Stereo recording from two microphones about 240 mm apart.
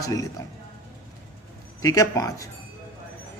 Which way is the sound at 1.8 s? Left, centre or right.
Centre.